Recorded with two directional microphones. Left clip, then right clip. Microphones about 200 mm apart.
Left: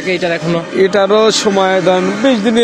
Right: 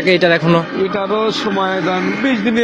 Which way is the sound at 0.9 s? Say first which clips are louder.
Left 7 dB; 60° left (ahead or behind).